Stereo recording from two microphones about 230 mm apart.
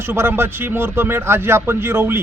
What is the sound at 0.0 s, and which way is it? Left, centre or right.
Speech, centre.